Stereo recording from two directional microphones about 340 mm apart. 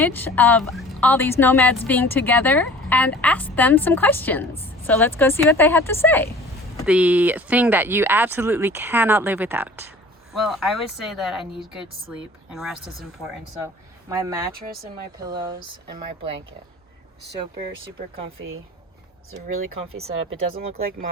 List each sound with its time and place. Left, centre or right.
0.0 s speech: centre
6.8 s speech: centre
12.5 s speech: centre
14.1 s speech: centre
20.5 s speech: centre